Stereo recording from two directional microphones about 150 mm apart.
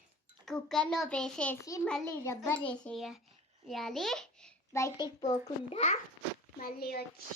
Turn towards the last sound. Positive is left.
turn(degrees=90)